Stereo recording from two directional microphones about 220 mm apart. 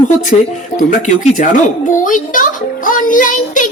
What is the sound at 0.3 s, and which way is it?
Speech, 30° left (ahead or behind).